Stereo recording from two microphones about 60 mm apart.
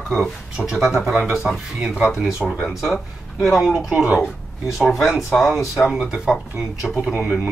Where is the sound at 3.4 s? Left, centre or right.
Centre.